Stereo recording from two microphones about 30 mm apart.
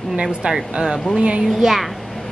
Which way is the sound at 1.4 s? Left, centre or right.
Centre.